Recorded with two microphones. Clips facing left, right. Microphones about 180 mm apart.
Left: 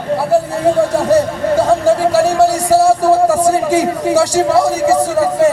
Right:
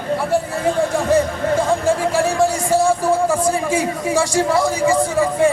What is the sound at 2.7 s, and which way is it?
Music, 35° left (ahead or behind).